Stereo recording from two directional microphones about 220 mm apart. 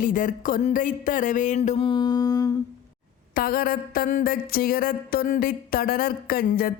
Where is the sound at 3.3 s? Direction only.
40° left (ahead or behind).